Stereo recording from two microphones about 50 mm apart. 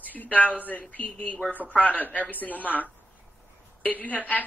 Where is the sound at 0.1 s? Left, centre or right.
Left.